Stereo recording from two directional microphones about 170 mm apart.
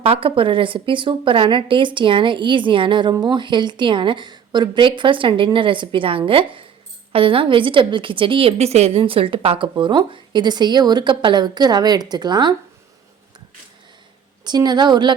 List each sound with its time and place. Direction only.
0.0 s a woman's voice: 35° right (ahead or behind)
14.4 s a woman's voice: 25° right (ahead or behind)